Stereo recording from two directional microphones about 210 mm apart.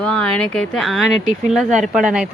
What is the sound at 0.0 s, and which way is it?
Speech, 5° left (ahead or behind).